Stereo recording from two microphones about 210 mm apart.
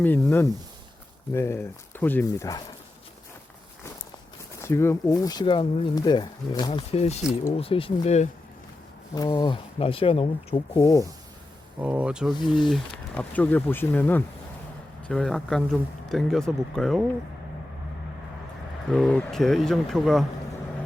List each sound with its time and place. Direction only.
0.0 s speech: 10° left (ahead or behind)
4.6 s speech: 10° left (ahead or behind); by 8.3 s 30° left (ahead or behind)
9.1 s speech: 20° left (ahead or behind)
11.8 s speech: 5° right (ahead or behind)
12.3 s speech: 20° left (ahead or behind)
12.7 s speech: 5° left (ahead or behind)
18.9 s speech: centre (ahead or behind)